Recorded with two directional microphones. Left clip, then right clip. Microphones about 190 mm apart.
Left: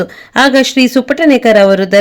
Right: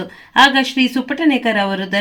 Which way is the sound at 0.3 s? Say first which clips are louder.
Left 3 dB; 55° left (ahead or behind).